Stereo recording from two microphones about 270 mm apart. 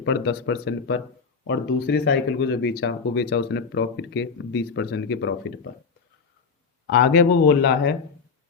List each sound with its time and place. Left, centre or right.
0.0 s speech: left
6.8 s speech: left